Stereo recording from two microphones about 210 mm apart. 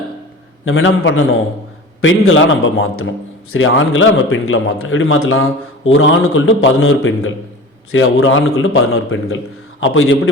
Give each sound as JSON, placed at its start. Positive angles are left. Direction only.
{"t": 0.6, "sound": "a man's voice", "side_deg": 65}